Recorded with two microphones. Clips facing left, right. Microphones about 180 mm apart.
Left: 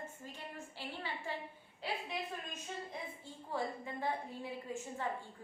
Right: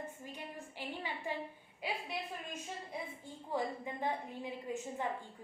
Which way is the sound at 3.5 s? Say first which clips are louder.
Right 2 dB; 15° right (ahead or behind).